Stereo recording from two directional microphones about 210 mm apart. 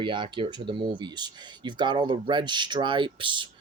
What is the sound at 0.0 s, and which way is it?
Speech, 20° right (ahead or behind).